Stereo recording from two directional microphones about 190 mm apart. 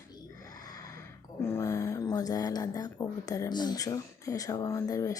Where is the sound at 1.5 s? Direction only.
15° left (ahead or behind).